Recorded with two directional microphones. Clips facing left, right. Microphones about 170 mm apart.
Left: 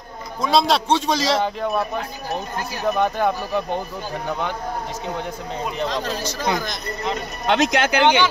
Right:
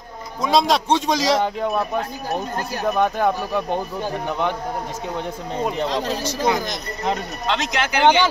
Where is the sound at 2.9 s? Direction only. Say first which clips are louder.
Right 1 dB; 10° right (ahead or behind).